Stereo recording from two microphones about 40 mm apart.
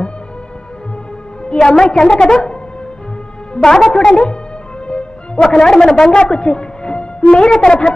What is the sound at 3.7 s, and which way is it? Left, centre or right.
Speech, centre.